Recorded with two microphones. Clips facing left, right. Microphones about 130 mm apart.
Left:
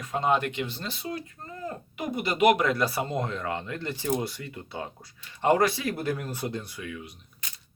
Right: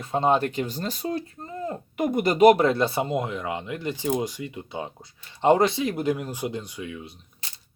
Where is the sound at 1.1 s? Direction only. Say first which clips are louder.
Right 6 dB; 25° right (ahead or behind).